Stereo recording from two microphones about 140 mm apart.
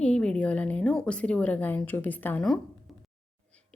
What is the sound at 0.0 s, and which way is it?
A woman's voice, 5° left (ahead or behind).